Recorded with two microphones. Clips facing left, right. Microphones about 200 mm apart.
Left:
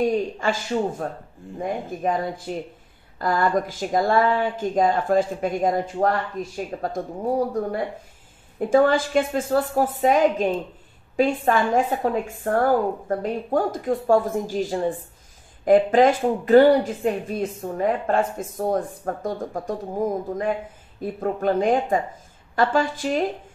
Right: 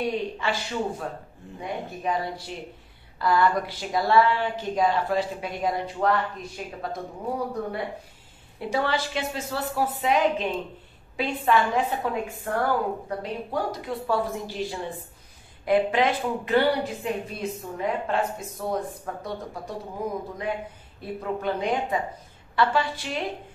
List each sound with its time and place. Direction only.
0.0 s speech: 45° left (ahead or behind)
8.5 s speech: 45° left (ahead or behind)